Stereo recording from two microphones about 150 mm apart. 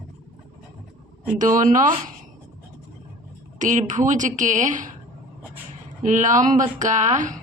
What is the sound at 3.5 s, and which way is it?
Speech, 55° right (ahead or behind).